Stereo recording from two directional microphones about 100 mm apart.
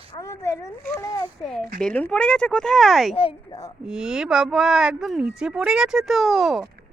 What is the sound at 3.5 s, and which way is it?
Speech, 35° left (ahead or behind).